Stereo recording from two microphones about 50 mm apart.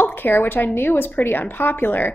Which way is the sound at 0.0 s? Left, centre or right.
Left.